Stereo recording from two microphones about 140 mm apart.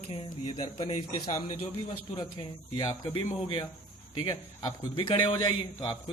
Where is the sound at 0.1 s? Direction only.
35° left (ahead or behind).